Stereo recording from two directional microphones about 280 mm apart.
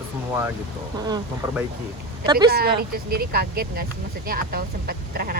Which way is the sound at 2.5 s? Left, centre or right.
Right.